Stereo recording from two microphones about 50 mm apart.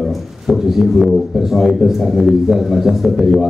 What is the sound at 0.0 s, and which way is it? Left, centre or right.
A man's voice, centre.